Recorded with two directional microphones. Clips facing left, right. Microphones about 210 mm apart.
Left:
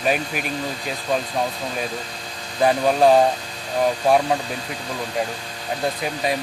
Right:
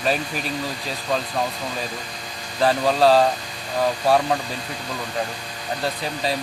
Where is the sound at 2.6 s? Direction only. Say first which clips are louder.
Left 1 dB; 15° left (ahead or behind).